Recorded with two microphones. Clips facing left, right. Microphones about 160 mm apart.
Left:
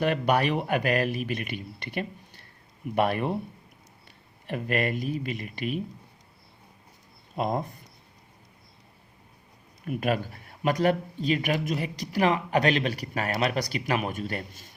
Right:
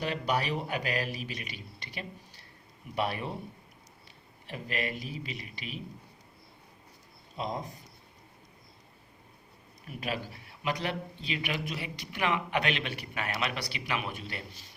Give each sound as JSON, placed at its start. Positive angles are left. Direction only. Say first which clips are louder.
{"t": 0.0, "sound": "a man's voice", "louder": "left 7 dB", "side_deg": 60}
{"t": 4.4, "sound": "speech", "louder": "left 8 dB", "side_deg": 55}
{"t": 7.3, "sound": "a man's voice", "louder": "left 7 dB", "side_deg": 55}
{"t": 9.8, "sound": "speech", "louder": "left 9 dB", "side_deg": 50}